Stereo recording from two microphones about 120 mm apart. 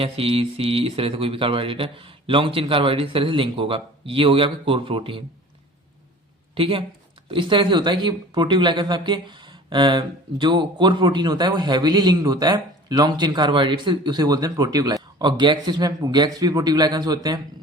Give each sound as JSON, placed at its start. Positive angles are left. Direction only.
{"t": 0.0, "sound": "speech", "side_deg": -55}
{"t": 6.5, "sound": "speech", "side_deg": -50}